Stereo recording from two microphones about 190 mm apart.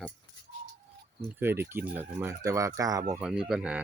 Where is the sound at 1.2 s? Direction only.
10° right (ahead or behind).